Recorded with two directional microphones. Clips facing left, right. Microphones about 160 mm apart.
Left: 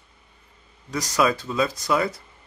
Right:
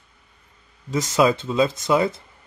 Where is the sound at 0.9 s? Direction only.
25° right (ahead or behind).